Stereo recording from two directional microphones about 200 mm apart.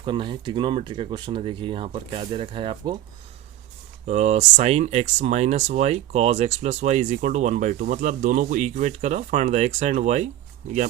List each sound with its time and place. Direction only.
0.0 s speech: 25° right (ahead or behind)
4.0 s speech: 35° right (ahead or behind)